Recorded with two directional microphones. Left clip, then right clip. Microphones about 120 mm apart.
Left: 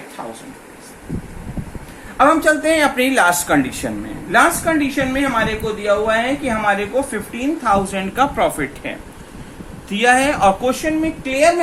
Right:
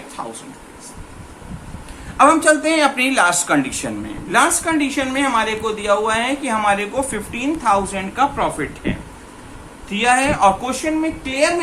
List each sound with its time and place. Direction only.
2.1 s a woman's voice: 20° left (ahead or behind)
4.3 s a woman's voice: 20° left (ahead or behind); by 8.9 s 45° left (ahead or behind)
9.9 s a woman's voice: 40° left (ahead or behind); by 11.4 s 20° left (ahead or behind)